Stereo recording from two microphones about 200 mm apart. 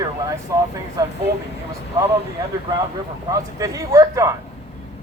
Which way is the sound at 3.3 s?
15° right (ahead or behind).